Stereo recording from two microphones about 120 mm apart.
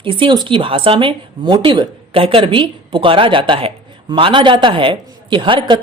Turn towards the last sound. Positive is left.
turn(degrees=-45)  # may be behind; listen again after turning